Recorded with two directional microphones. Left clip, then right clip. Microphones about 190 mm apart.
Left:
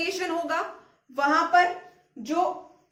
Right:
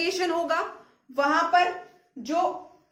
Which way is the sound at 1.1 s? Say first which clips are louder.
Even; 15° right (ahead or behind).